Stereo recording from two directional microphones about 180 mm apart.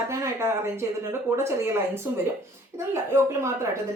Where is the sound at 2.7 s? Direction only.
15° right (ahead or behind).